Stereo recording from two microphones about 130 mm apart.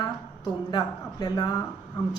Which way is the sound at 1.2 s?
30° left (ahead or behind).